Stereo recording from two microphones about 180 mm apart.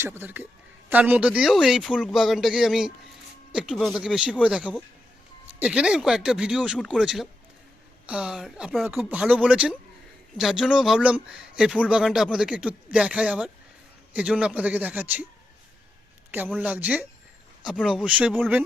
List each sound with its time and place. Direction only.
0.0 s a man's voice: 10° right (ahead or behind)
16.6 s a man's voice: 10° right (ahead or behind)